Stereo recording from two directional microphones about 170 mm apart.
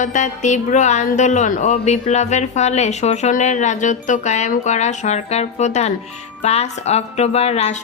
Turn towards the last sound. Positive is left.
turn(degrees=40)  # may be behind; listen again after turning